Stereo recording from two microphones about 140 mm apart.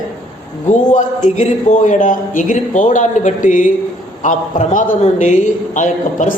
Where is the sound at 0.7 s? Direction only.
60° left (ahead or behind).